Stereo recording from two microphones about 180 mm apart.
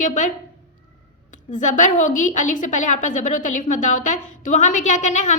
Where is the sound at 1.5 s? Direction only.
45° left (ahead or behind).